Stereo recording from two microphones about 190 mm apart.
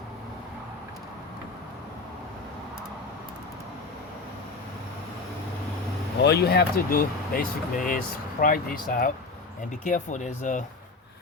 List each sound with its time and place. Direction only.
6.2 s speech: 60° left (ahead or behind); by 10.6 s 40° left (ahead or behind)